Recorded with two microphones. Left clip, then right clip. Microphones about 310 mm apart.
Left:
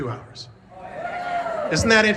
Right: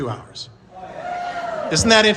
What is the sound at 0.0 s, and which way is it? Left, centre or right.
Speech, centre.